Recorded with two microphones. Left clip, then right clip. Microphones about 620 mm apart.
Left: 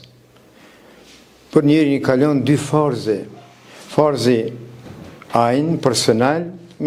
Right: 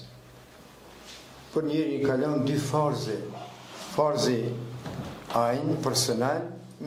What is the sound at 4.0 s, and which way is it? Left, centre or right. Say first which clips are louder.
Speech: left 9 dB; left.